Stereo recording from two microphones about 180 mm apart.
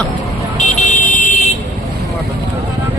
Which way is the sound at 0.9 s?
45° left (ahead or behind).